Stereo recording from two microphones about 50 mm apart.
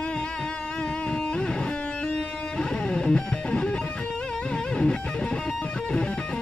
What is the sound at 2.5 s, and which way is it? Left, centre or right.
Music, centre.